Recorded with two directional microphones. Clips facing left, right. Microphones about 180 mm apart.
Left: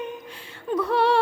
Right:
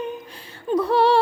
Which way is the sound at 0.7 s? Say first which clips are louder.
Right 3 dB; 35° right (ahead or behind).